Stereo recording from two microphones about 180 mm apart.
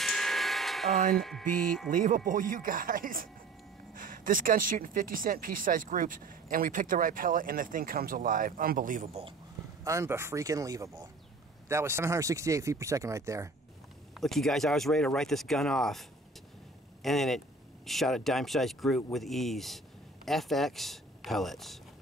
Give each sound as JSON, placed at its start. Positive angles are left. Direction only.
{"t": 0.0, "sound": "a sound", "side_deg": 0}
{"t": 1.1, "sound": "speech", "side_deg": 0}
{"t": 1.9, "sound": "speech", "side_deg": -45}
{"t": 9.8, "sound": "speech", "side_deg": -15}
{"t": 14.1, "sound": "speech", "side_deg": 0}